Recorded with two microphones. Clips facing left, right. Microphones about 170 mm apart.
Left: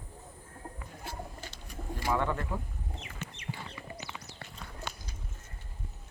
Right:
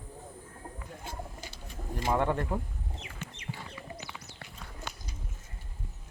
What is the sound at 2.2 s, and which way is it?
Speech, 35° right (ahead or behind).